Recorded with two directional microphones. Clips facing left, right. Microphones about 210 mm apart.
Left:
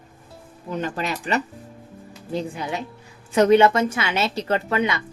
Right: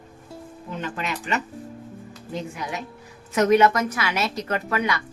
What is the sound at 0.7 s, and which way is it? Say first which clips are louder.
Speech: left 4 dB; 40° left (ahead or behind).